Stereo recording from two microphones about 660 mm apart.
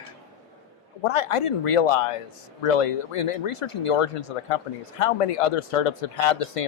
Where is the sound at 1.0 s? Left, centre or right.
Left.